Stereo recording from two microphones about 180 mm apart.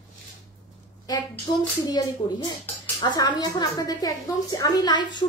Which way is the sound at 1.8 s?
20° left (ahead or behind).